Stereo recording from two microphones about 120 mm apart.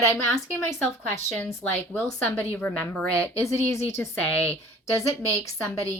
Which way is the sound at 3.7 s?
25° left (ahead or behind).